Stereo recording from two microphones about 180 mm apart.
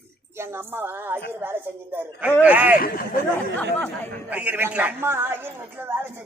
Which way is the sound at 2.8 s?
55° left (ahead or behind).